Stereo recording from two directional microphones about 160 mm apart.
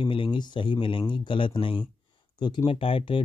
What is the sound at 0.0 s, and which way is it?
Speech, 30° left (ahead or behind).